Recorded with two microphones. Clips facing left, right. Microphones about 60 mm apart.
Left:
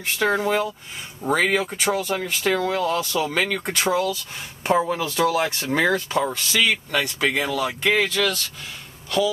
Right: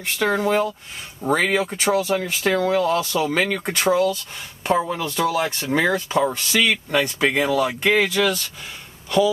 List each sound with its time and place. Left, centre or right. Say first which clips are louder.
0.0 s speech: right 1 dB; centre
6.3 s speech: right 1 dB; centre